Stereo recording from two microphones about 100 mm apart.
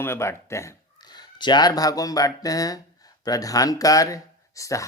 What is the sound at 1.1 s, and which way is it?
Speech, 45° left (ahead or behind).